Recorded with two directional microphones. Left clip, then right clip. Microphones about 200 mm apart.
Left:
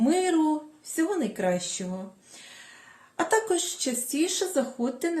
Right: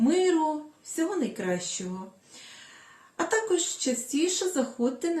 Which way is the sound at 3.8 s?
45° left (ahead or behind).